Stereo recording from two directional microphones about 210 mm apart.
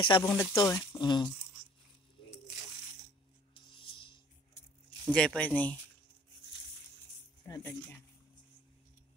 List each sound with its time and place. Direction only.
0.1 s speech: 15° left (ahead or behind)
3.6 s a sound: 25° left (ahead or behind)
5.0 s speech: 5° left (ahead or behind)
7.4 s speech: 15° left (ahead or behind)